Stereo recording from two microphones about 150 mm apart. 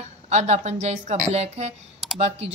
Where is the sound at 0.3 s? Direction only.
45° right (ahead or behind).